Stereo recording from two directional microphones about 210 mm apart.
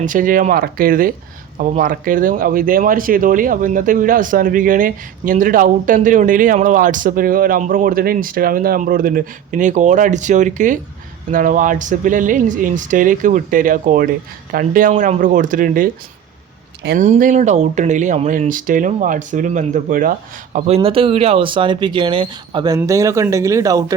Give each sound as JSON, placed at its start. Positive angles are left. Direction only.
{"t": 0.0, "sound": "speech", "side_deg": -40}
{"t": 17.0, "sound": "speech", "side_deg": -35}